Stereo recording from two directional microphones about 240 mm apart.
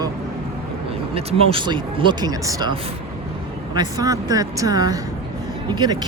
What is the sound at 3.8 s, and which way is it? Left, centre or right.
Speech, centre.